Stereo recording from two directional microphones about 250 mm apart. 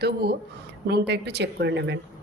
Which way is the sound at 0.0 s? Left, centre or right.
Right.